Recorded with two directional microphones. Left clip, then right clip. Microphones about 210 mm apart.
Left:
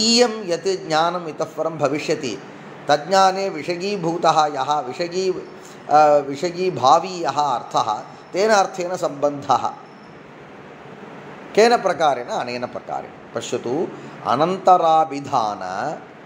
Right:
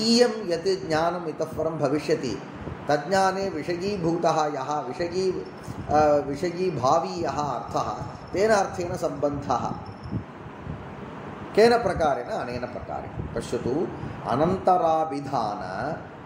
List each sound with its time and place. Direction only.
0.0 s a man's voice: 20° left (ahead or behind)
11.5 s a man's voice: 20° left (ahead or behind)